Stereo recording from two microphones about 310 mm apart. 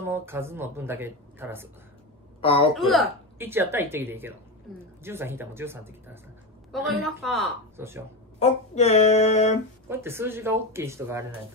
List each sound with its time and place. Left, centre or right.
0.0 s speech: centre
2.4 s a woman's voice: centre
2.9 s a woman's voice: centre
8.4 s speech: left
9.8 s speech: centre